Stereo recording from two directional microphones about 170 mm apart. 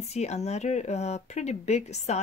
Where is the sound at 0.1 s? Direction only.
40° left (ahead or behind).